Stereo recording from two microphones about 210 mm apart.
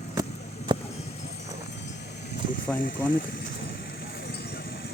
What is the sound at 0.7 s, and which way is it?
Clip-clop, 25° right (ahead or behind).